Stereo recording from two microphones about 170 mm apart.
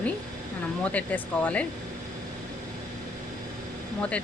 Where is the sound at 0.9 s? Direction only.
10° left (ahead or behind).